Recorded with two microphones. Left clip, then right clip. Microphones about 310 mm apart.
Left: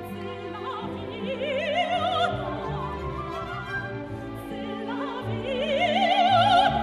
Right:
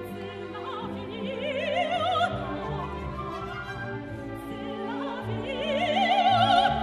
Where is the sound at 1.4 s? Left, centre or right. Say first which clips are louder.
Left 2 dB; centre.